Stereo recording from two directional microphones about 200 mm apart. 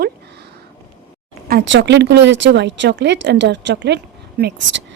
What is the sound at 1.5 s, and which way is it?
Speech, 55° right (ahead or behind).